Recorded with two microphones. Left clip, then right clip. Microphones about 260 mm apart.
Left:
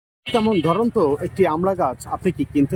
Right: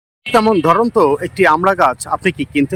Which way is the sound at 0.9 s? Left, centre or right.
Centre.